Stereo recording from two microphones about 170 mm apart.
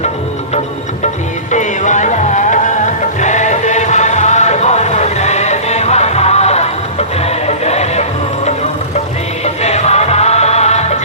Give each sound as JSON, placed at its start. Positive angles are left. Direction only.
{"t": 1.5, "sound": "music", "side_deg": 45}
{"t": 9.4, "sound": "music", "side_deg": 40}